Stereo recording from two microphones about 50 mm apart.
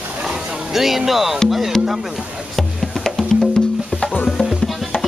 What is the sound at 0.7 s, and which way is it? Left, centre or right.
Speech, centre.